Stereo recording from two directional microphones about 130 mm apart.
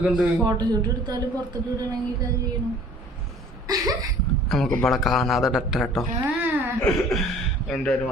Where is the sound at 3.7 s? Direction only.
30° right (ahead or behind).